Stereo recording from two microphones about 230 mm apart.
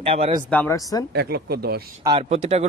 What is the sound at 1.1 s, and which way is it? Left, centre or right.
Speech, right.